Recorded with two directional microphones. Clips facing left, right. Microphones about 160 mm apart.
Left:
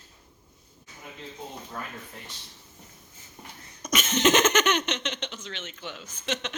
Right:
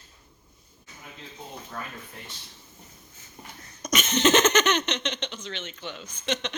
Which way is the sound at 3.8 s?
5° left (ahead or behind).